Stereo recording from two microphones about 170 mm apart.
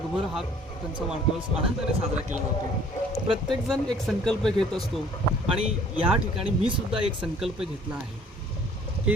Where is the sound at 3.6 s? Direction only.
Centre (ahead or behind).